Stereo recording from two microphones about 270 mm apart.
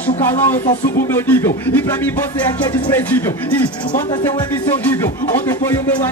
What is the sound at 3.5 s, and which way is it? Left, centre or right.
Speech, centre.